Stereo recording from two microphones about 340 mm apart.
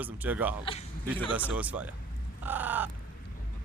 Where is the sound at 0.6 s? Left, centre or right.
Centre.